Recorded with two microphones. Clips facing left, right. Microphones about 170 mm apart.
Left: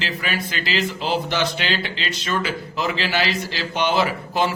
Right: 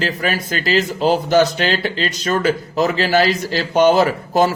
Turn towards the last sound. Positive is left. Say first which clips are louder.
# right 6 dB
turn(degrees=-45)  # may be behind; listen again after turning